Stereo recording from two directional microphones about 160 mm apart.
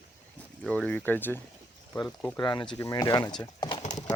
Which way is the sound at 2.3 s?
25° left (ahead or behind).